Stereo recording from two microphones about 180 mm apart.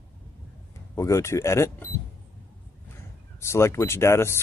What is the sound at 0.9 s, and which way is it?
Speech, 15° left (ahead or behind).